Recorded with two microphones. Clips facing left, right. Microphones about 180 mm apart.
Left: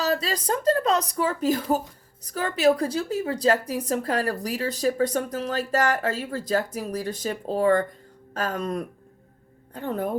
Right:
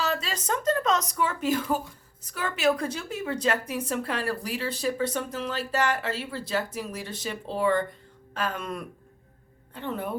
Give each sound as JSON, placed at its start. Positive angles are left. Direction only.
{"t": 0.0, "sound": "a woman's voice", "side_deg": 40}